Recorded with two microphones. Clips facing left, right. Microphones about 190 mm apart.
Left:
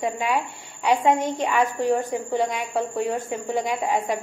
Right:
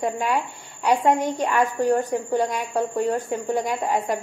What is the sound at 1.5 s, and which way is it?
A woman's voice, centre (ahead or behind).